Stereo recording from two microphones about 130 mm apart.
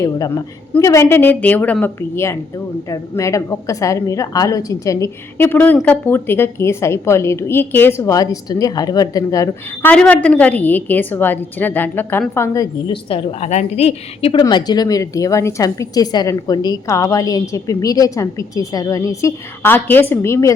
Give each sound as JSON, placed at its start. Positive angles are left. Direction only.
{"t": 0.0, "sound": "a woman's voice", "side_deg": 25}
{"t": 9.9, "sound": "a woman's voice", "side_deg": 10}
{"t": 12.9, "sound": "a woman's voice", "side_deg": 45}
{"t": 13.5, "sound": "a woman's voice", "side_deg": 60}
{"t": 14.4, "sound": "a woman's voice", "side_deg": 30}